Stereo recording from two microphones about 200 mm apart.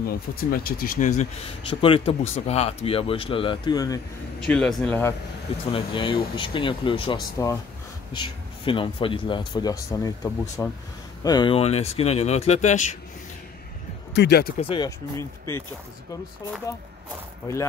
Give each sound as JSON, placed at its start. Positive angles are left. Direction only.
{"t": 0.0, "sound": "speech", "side_deg": 50}
{"t": 1.7, "sound": "speech", "side_deg": 25}
{"t": 4.5, "sound": "speech", "side_deg": 5}
{"t": 5.7, "sound": "speech", "side_deg": 25}
{"t": 11.2, "sound": "speech", "side_deg": 20}
{"t": 14.1, "sound": "speech", "side_deg": 55}
{"t": 14.6, "sound": "speech", "side_deg": 25}